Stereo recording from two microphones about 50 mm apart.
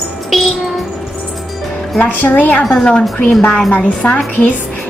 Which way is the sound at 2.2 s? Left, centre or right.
Left.